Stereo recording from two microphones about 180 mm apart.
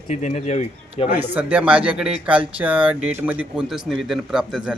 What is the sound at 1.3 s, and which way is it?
A man's voice, 10° right (ahead or behind).